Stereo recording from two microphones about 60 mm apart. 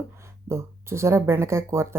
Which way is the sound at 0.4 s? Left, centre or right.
Right.